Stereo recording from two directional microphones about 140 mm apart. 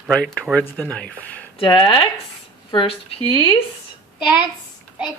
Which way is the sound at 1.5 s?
35° left (ahead or behind).